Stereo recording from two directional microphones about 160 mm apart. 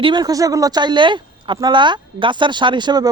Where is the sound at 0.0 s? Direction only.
25° right (ahead or behind).